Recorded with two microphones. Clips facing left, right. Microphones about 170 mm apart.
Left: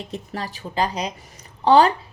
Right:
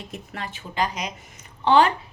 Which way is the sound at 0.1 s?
35° left (ahead or behind).